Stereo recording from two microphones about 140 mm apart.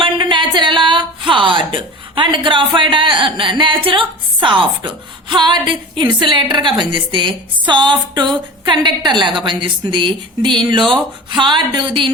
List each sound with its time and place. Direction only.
0.0 s a woman's voice: 35° right (ahead or behind)